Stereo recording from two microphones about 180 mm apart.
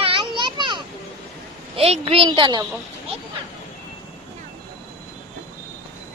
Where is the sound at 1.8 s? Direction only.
35° right (ahead or behind).